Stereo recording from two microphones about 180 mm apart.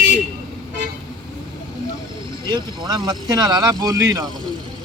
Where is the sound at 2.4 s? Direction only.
25° right (ahead or behind).